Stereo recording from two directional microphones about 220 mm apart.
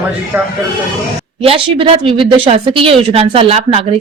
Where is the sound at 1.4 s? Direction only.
25° right (ahead or behind).